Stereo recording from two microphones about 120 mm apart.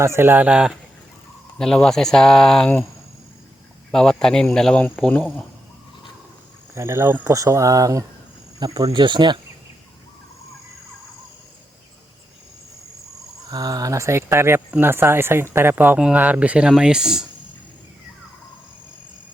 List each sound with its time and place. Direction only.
0.0 s speech: 20° right (ahead or behind)
1.5 s speech: 5° left (ahead or behind)
3.9 s speech: 5° left (ahead or behind)
6.7 s speech: 20° right (ahead or behind); by 9.4 s 40° right (ahead or behind)
13.5 s speech: 30° right (ahead or behind); by 17.2 s 5° right (ahead or behind)